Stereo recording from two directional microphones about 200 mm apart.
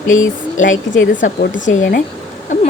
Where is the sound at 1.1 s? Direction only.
40° left (ahead or behind).